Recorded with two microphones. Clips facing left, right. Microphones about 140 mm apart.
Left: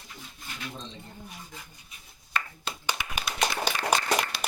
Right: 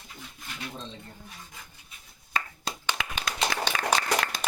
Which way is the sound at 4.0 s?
90° right.